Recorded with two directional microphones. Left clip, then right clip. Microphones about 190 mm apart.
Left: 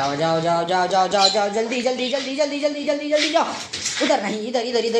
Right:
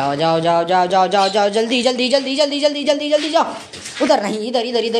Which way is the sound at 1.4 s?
55° right (ahead or behind).